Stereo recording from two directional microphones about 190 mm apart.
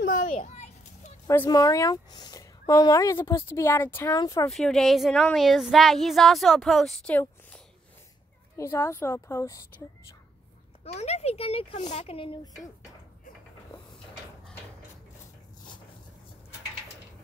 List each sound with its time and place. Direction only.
0.0 s children playing: 45° left (ahead or behind)
1.2 s speech: 15° left (ahead or behind)
4.5 s speech: centre (ahead or behind)
10.8 s speech: 35° left (ahead or behind)